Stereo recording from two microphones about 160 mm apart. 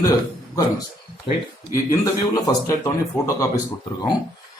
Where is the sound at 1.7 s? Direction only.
20° left (ahead or behind).